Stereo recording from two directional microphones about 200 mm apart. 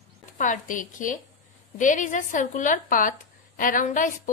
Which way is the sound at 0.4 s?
40° left (ahead or behind).